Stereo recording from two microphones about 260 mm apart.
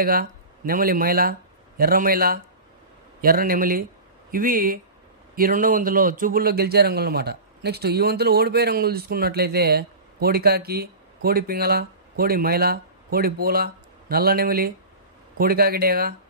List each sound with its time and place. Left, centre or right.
0.0 s a man's voice: right